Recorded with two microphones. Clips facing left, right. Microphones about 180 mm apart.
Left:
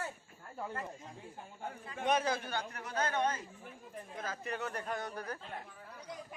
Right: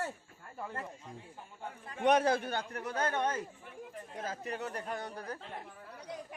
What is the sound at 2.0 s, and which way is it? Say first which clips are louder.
Speech: right 5 dB; 65° right (ahead or behind).